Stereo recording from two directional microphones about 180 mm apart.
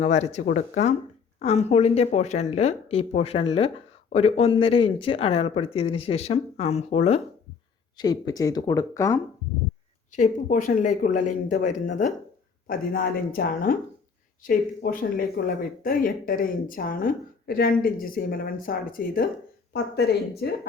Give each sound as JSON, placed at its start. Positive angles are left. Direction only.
{"t": 0.0, "sound": "speech", "side_deg": 35}
{"t": 7.9, "sound": "speech", "side_deg": 20}
{"t": 10.2, "sound": "speech", "side_deg": 45}
{"t": 12.6, "sound": "speech", "side_deg": 55}